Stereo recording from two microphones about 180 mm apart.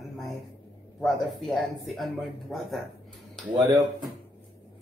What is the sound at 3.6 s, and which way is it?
Speech, 25° right (ahead or behind).